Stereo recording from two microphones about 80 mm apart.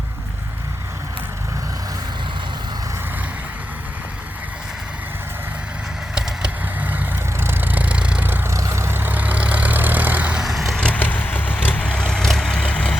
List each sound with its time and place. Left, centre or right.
6.1 s vehicle: centre
8.3 s vehicle: right; by 10.4 s centre
10.4 s vehicle: centre
10.8 s vehicle: centre